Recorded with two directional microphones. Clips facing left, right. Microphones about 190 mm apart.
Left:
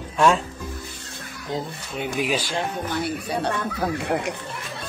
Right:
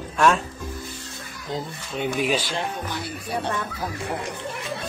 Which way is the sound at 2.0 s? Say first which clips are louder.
Right 1 dB; 10° left (ahead or behind).